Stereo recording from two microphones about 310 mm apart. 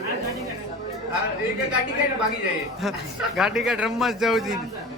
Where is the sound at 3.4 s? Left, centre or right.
Centre.